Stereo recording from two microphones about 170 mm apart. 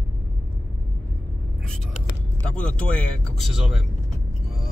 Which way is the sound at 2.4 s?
5° left (ahead or behind).